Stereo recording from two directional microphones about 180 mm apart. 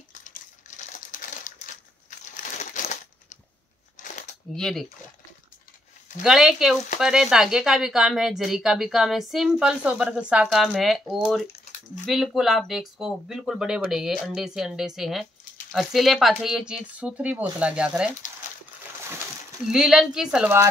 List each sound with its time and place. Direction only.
0.2 s crumpling: 45° left (ahead or behind)
2.0 s crushing: 45° left (ahead or behind)
4.0 s crumpling: 45° left (ahead or behind)
4.5 s speech: centre (ahead or behind)
6.2 s speech: centre (ahead or behind)
19.7 s speech: centre (ahead or behind)